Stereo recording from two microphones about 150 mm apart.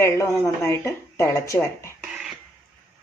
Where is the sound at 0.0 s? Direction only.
20° left (ahead or behind).